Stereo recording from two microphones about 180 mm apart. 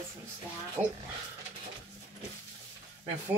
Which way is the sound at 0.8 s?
10° right (ahead or behind).